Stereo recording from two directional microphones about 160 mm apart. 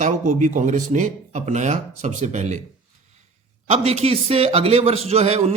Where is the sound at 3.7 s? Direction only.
40° right (ahead or behind).